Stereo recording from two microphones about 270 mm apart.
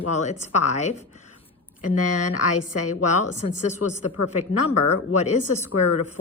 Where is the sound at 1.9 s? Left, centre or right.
Left.